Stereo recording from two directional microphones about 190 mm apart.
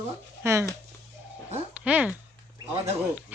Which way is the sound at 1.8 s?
5° right (ahead or behind).